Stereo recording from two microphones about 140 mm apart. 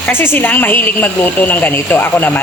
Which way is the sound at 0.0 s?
15° left (ahead or behind).